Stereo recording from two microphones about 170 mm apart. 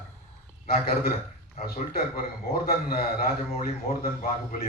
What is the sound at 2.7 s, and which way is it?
Speech, 60° left (ahead or behind).